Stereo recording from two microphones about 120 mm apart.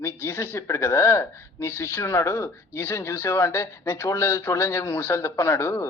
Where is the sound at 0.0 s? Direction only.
20° left (ahead or behind).